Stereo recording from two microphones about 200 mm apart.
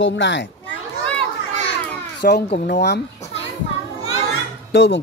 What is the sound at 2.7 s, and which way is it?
Speech, 55° left (ahead or behind).